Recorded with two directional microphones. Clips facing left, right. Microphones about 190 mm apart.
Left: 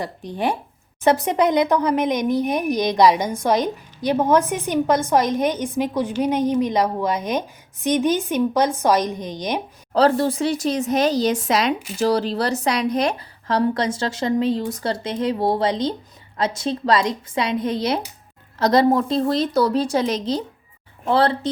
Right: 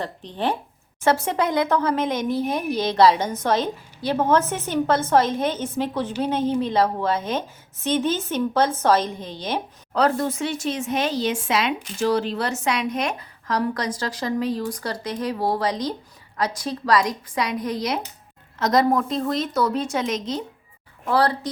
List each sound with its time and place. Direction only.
0.0 s speech: 10° left (ahead or behind)
9.9 s speech: 30° left (ahead or behind)